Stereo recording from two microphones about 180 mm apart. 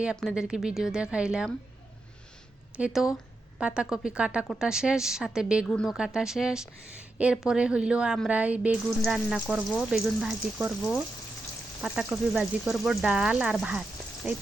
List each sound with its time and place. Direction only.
0.0 s speech: 5° right (ahead or behind)
2.7 s speech: 5° right (ahead or behind)